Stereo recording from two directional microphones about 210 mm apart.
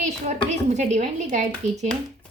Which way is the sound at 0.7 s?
35° right (ahead or behind).